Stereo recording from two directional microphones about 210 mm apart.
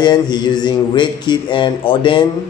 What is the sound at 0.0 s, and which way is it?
Speech, 20° left (ahead or behind).